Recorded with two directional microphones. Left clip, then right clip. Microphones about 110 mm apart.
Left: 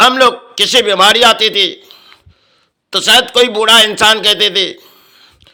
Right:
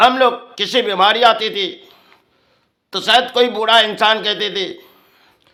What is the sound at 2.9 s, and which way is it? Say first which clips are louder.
A man's voice: left 5 dB; 20° left (ahead or behind).